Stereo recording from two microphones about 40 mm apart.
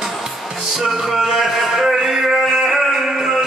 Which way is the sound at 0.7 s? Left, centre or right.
Centre.